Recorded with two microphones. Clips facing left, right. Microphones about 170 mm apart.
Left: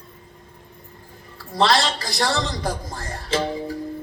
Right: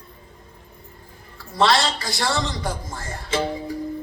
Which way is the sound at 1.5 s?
35° left (ahead or behind).